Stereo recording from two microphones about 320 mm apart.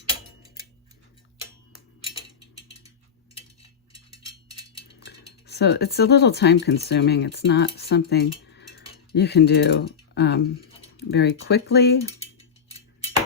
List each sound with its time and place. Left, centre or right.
5.5 s speech: left